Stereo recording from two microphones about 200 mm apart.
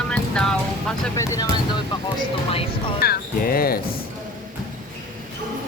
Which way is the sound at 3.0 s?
50° left (ahead or behind).